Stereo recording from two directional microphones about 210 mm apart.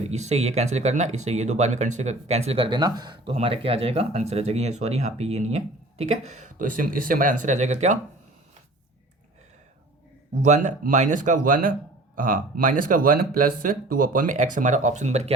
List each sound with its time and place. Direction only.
0.1 s speech: 30° right (ahead or behind)
10.4 s speech: 35° right (ahead or behind)